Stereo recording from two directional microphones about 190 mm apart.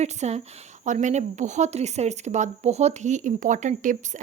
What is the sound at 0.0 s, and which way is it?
Speech, 35° right (ahead or behind).